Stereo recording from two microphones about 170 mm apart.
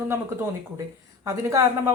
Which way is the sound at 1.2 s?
20° right (ahead or behind).